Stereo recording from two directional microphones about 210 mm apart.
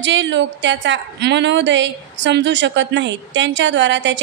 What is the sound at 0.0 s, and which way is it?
A woman's voice, 60° right (ahead or behind).